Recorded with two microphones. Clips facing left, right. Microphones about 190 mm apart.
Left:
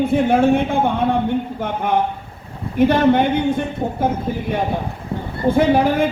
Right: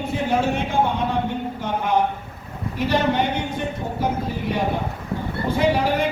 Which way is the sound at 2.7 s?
55° left (ahead or behind).